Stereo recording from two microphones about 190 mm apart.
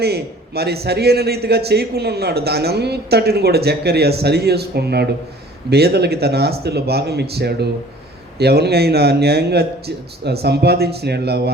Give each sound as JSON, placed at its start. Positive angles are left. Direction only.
{"t": 0.0, "sound": "a man's voice", "side_deg": -60}